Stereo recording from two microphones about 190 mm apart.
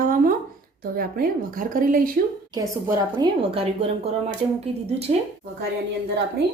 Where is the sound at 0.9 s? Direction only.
50° right (ahead or behind).